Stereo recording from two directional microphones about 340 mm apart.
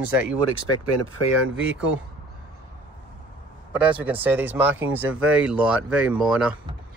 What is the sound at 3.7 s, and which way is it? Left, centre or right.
Speech, centre.